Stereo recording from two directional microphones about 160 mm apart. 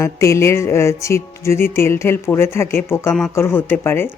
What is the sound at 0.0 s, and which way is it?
Speech, 20° left (ahead or behind).